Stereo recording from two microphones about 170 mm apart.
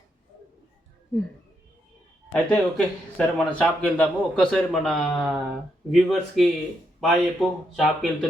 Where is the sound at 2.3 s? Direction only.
5° left (ahead or behind).